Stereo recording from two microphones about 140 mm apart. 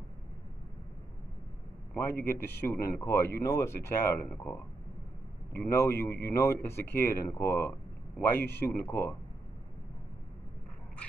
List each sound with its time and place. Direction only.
2.0 s speech: 15° left (ahead or behind)